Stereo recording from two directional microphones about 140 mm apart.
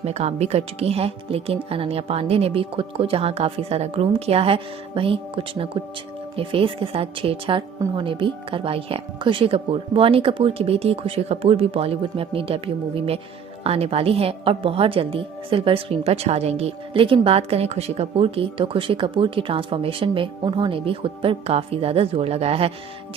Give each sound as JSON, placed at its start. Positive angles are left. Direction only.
{"t": 0.0, "sound": "a woman's voice", "side_deg": -50}